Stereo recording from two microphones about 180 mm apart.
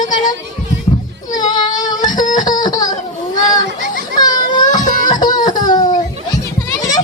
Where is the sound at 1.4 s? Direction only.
25° left (ahead or behind).